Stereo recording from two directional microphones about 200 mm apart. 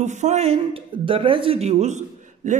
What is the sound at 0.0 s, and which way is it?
A woman's voice, 35° right (ahead or behind).